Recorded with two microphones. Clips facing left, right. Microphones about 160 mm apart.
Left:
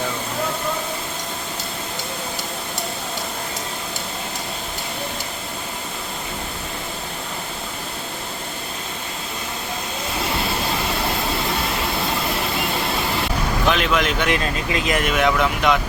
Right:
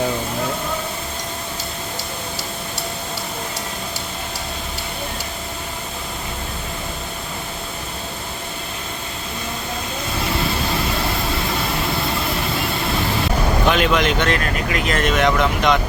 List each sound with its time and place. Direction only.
13.7 s speech: centre (ahead or behind)
14.3 s speech: 20° left (ahead or behind)
15.0 s speech: 5° left (ahead or behind)